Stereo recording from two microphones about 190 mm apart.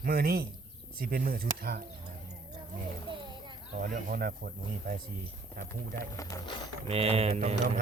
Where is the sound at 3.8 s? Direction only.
45° right (ahead or behind).